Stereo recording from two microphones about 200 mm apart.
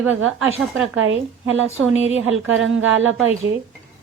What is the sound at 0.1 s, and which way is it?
Speech, 80° right.